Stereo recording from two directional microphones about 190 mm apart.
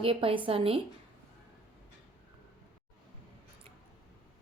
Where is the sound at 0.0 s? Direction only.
30° right (ahead or behind).